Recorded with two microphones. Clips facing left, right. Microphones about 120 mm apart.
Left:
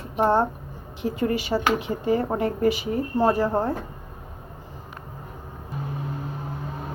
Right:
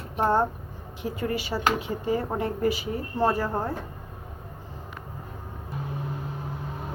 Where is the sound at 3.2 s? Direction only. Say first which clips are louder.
Left 3 dB; 15° left (ahead or behind).